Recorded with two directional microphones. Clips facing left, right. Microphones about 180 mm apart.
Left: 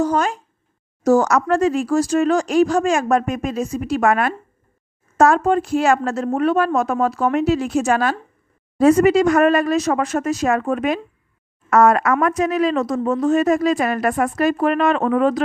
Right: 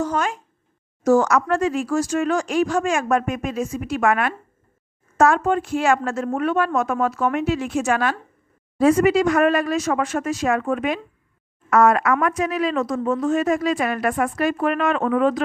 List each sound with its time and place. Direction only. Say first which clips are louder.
0.0 s speech: left 4 dB; 35° left (ahead or behind)